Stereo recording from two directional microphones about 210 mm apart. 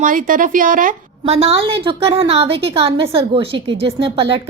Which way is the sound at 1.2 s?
30° right (ahead or behind).